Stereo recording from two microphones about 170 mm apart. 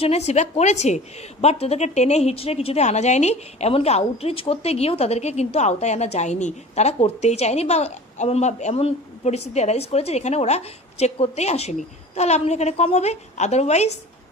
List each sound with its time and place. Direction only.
0.0 s a woman's voice: 40° left (ahead or behind)